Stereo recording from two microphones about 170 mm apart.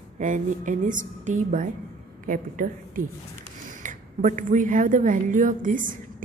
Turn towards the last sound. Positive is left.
turn(degrees=-50)  # may be behind; listen again after turning